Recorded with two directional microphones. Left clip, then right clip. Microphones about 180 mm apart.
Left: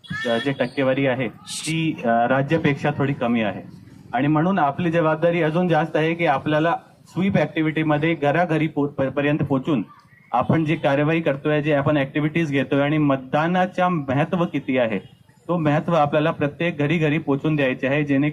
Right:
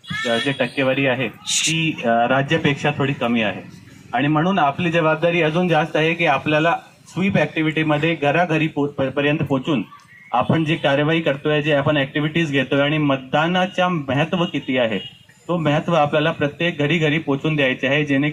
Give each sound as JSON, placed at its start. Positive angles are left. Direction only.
{"t": 0.3, "sound": "speech", "side_deg": -30}
{"t": 1.5, "sound": "speech", "side_deg": 10}
{"t": 1.8, "sound": "speech", "side_deg": -25}